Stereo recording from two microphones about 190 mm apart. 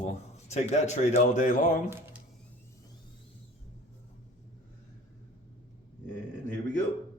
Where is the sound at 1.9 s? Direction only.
15° right (ahead or behind).